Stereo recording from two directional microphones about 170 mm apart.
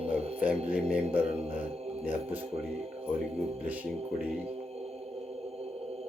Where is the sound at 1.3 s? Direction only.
35° right (ahead or behind).